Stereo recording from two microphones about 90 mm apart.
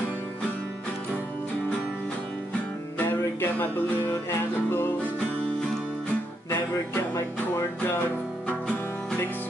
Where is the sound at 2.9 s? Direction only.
20° left (ahead or behind).